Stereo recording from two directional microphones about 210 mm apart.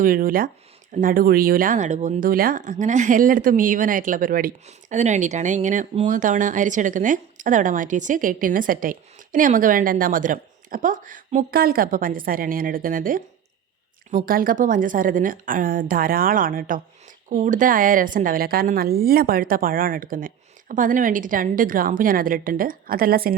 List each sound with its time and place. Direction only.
0.0 s a woman's voice: 45° right (ahead or behind)